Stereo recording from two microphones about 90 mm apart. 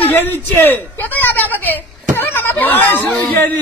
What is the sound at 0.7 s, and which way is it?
Speech, 20° left (ahead or behind).